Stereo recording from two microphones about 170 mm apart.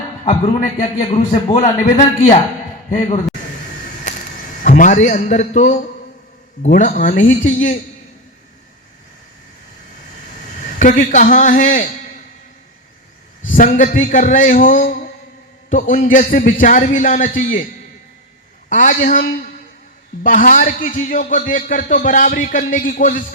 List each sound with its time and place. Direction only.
0.3 s a man's voice: 45° left (ahead or behind)
4.6 s a man's voice: 50° left (ahead or behind)
10.8 s a man's voice: 50° left (ahead or behind)
13.5 s a man's voice: 50° left (ahead or behind)
18.7 s a man's voice: 50° left (ahead or behind)